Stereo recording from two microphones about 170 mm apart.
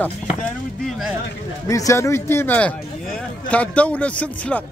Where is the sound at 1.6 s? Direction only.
20° left (ahead or behind).